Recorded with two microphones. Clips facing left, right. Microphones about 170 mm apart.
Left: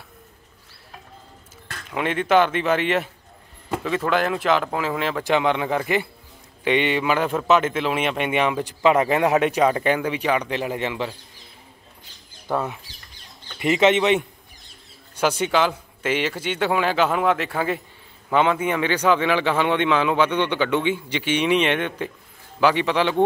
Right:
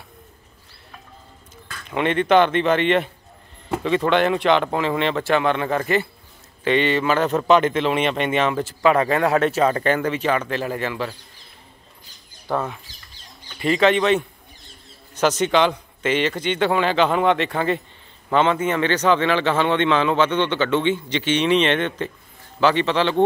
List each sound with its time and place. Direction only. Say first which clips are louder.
1.9 s a man's voice: right 3 dB; 5° left (ahead or behind)
5.2 s a man's voice: right 1 dB; 15° left (ahead or behind)
12.4 s a man's voice: even; 15° left (ahead or behind)